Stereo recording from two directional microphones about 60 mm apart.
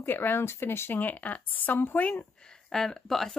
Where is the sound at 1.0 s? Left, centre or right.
Left.